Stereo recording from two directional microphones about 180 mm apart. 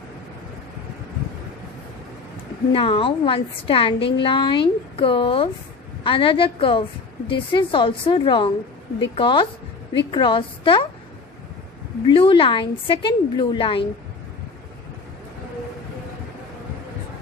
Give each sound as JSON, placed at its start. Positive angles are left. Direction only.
{"t": 2.7, "sound": "a woman's voice", "side_deg": 30}
{"t": 12.1, "sound": "a woman's voice", "side_deg": 30}